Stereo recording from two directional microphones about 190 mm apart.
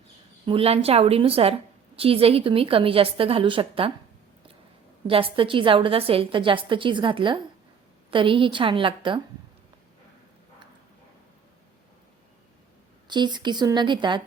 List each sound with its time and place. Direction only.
0.4 s a woman's voice: 30° right (ahead or behind)
5.0 s a woman's voice: 30° right (ahead or behind)
13.1 s a woman's voice: 25° right (ahead or behind)